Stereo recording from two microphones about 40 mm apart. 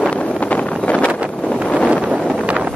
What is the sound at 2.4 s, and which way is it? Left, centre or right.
Wind noise, right.